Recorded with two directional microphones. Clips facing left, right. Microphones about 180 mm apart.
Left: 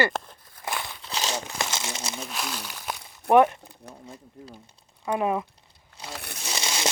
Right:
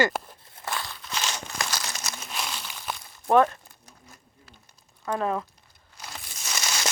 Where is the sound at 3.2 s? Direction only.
15° left (ahead or behind).